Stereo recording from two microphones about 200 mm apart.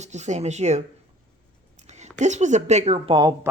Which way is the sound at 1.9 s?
35° right (ahead or behind).